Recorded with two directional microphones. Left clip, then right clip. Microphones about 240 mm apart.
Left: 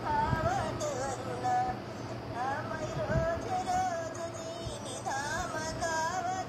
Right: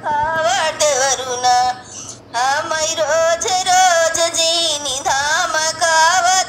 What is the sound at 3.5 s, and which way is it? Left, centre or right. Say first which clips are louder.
Music: right 18 dB; right.